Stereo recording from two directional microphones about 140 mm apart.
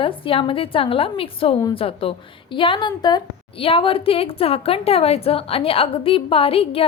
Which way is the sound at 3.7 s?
40° left (ahead or behind).